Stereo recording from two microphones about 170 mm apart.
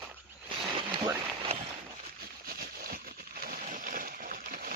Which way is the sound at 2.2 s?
60° right (ahead or behind).